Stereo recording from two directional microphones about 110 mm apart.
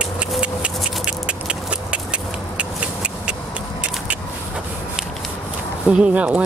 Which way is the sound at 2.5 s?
10° right (ahead or behind).